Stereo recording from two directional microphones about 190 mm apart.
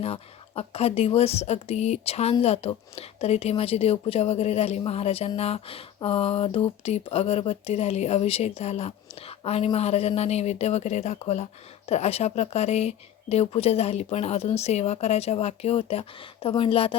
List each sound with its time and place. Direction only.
0.0 s a woman's voice: 30° left (ahead or behind)